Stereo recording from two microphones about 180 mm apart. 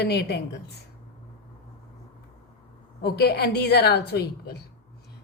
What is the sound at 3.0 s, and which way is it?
A woman's voice, 60° left (ahead or behind).